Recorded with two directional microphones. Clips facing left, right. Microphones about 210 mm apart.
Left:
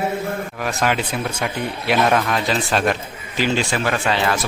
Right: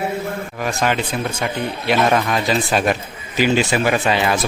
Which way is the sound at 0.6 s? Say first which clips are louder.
Right 1 dB; centre (ahead or behind).